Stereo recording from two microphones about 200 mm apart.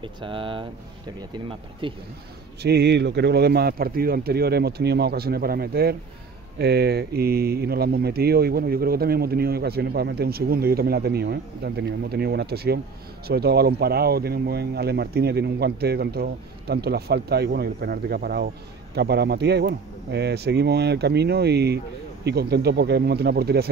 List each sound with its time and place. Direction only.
0.0 s speech: 25° right (ahead or behind)
2.6 s speech: 55° right (ahead or behind)